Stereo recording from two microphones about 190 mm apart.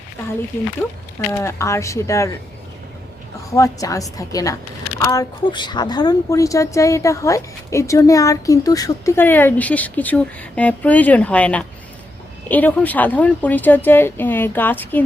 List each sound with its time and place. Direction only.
1.3 s speech: 15° left (ahead or behind)
3.5 s speech: 15° left (ahead or behind)